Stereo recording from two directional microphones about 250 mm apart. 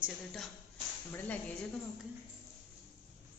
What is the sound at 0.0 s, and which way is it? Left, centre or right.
Speech, centre.